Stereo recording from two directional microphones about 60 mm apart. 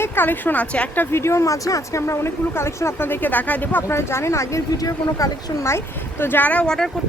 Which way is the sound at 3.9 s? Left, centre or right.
Left.